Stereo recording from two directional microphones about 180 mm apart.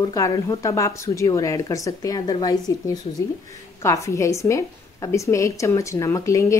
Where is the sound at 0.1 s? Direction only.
15° left (ahead or behind).